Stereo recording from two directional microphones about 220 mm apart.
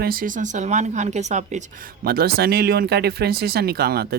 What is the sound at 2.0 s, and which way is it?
Speech, 45° right (ahead or behind).